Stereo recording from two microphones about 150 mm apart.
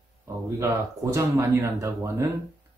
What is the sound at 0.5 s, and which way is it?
Speech, 20° right (ahead or behind).